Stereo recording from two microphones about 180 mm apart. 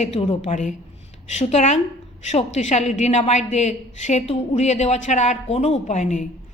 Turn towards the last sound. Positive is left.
turn(degrees=40)  # may be behind; listen again after turning